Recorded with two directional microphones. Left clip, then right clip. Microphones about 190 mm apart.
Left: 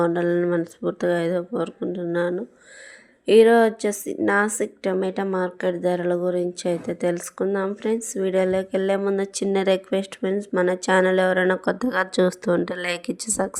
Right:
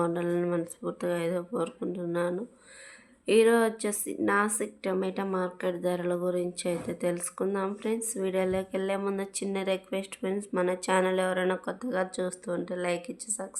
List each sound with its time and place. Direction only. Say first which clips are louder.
0.0 s a woman's voice: left 8 dB; 25° left (ahead or behind); by 13.5 s 45° left (ahead or behind)